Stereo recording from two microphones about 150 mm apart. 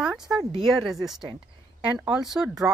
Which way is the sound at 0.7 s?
Centre (ahead or behind).